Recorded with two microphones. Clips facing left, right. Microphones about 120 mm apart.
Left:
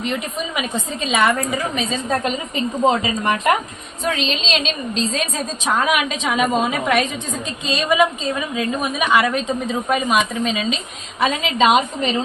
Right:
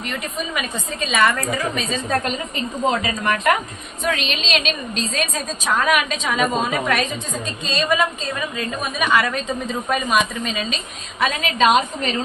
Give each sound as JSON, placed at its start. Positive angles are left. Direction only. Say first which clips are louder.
{"t": 0.0, "sound": "a woman's voice", "louder": "left 3 dB", "side_deg": 20}